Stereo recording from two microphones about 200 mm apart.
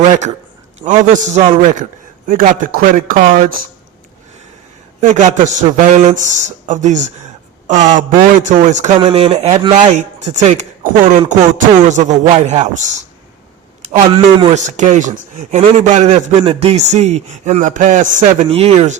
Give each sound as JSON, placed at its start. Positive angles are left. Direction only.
{"t": 0.8, "sound": "a man's voice", "side_deg": -40}
{"t": 4.9, "sound": "a man's voice", "side_deg": -35}
{"t": 14.5, "sound": "a man's voice", "side_deg": -35}